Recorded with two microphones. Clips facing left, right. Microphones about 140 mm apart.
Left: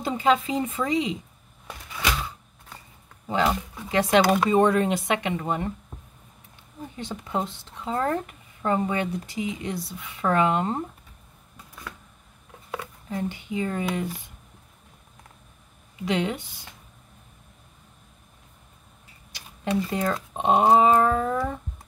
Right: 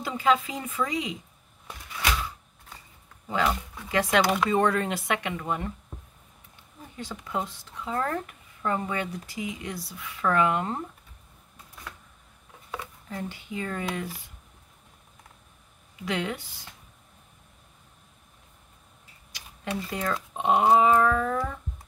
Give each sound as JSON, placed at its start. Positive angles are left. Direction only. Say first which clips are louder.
{"t": 0.0, "sound": "speech", "louder": "left 2 dB", "side_deg": 25}
{"t": 3.3, "sound": "speech", "louder": "left 3 dB", "side_deg": 25}
{"t": 7.0, "sound": "speech", "louder": "left 3 dB", "side_deg": 25}
{"t": 13.1, "sound": "speech", "louder": "left 6 dB", "side_deg": 20}
{"t": 16.1, "sound": "speech", "louder": "left 4 dB", "side_deg": 20}
{"t": 19.3, "sound": "speech", "louder": "left 7 dB", "side_deg": 30}